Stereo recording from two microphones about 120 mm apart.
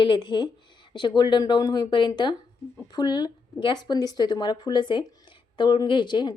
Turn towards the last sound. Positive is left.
turn(degrees=40)  # may be behind; listen again after turning